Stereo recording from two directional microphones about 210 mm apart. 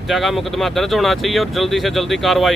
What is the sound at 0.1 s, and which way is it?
Speech, centre (ahead or behind).